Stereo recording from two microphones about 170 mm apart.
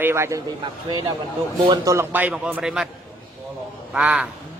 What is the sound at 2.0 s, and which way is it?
Speech, 10° right (ahead or behind).